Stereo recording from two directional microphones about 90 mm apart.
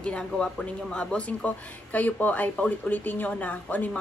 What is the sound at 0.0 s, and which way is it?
Speech, 10° left (ahead or behind).